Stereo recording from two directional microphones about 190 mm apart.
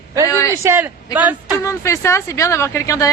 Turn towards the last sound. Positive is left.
turn(degrees=15)  # may be behind; listen again after turning